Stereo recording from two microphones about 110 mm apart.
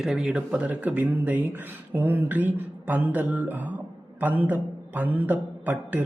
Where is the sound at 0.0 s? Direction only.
5° right (ahead or behind).